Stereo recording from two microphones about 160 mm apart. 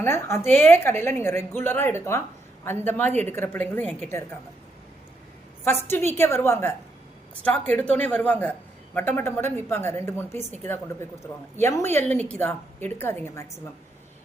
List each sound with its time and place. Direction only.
0.0 s a woman's voice: 15° left (ahead or behind)
5.6 s a woman's voice: 15° left (ahead or behind)